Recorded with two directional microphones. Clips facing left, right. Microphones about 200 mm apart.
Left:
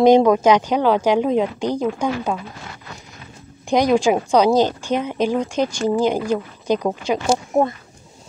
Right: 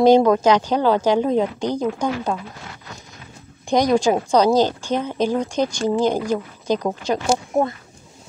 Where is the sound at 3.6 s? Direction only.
5° left (ahead or behind).